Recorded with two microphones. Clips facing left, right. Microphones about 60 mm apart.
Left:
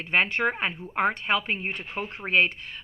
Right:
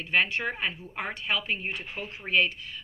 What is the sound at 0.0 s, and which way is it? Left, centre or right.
A woman's voice, left.